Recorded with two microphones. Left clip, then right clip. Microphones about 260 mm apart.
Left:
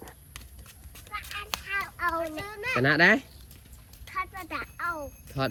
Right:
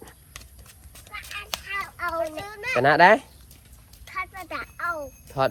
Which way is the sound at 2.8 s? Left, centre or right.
Centre.